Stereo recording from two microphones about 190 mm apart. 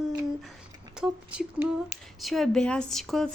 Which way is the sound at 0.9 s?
5° right (ahead or behind).